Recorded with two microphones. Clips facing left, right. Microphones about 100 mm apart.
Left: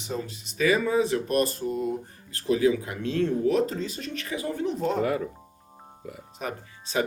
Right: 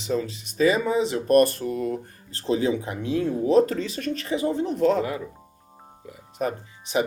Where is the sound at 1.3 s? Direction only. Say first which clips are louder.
Right 7 dB; 60° right (ahead or behind).